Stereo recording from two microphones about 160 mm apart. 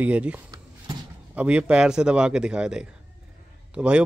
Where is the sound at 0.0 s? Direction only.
10° right (ahead or behind).